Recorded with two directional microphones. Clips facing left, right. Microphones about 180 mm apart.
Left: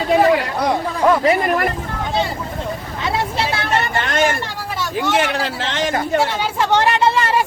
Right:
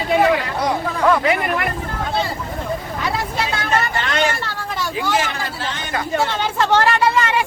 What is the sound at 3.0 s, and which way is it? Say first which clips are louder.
Vehicle: left 5 dB; 25° left (ahead or behind).